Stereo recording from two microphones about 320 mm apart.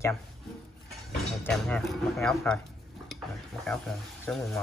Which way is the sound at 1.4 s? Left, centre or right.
Centre.